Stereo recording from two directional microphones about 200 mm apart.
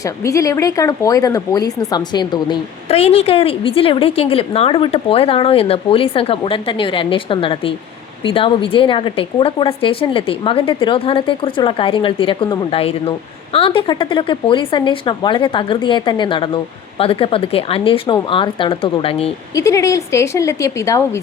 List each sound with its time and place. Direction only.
0.0 s a woman's voice: 15° left (ahead or behind)
19.5 s a woman's voice: 15° left (ahead or behind)